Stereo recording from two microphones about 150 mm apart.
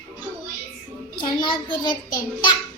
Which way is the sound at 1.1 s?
35° left (ahead or behind).